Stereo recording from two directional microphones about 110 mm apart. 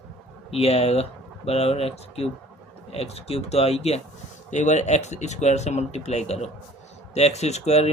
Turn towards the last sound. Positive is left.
turn(degrees=75)  # may be behind; listen again after turning